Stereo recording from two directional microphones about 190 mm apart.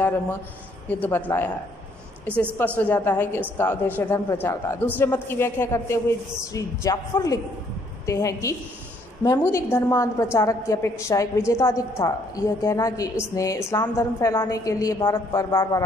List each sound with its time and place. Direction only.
0.8 s a man's voice: 10° left (ahead or behind)
2.5 s a man's voice: 10° left (ahead or behind)